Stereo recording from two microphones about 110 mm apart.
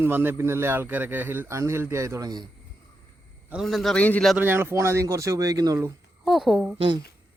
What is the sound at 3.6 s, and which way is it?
Speech, centre (ahead or behind).